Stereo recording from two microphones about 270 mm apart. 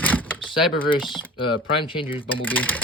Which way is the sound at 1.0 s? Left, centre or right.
Centre.